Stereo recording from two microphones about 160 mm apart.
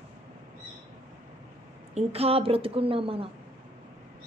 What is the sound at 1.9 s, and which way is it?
A woman's voice, 40° right (ahead or behind).